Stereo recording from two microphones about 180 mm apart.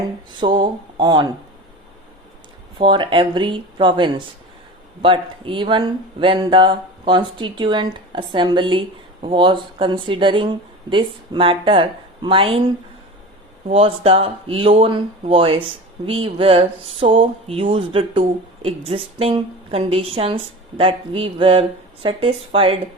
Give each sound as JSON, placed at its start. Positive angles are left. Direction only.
{"t": 0.3, "sound": "speech", "side_deg": -25}
{"t": 2.7, "sound": "speech", "side_deg": -25}
{"t": 13.7, "sound": "speech", "side_deg": -30}